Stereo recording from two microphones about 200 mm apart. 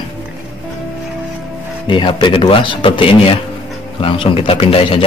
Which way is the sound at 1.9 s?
25° left (ahead or behind).